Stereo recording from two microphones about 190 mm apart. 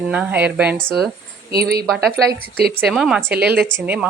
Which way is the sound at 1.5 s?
55° right (ahead or behind).